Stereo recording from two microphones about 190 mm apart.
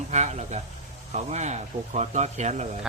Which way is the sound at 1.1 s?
40° right (ahead or behind).